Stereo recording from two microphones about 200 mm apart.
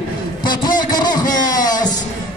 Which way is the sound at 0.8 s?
20° left (ahead or behind).